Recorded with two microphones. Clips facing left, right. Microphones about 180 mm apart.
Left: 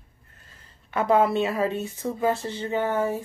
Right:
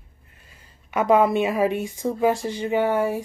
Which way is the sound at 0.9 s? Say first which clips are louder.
Right 3 dB; 15° right (ahead or behind).